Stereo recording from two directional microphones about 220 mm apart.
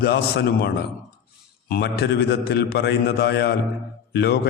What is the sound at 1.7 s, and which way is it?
Speech, 45° left (ahead or behind).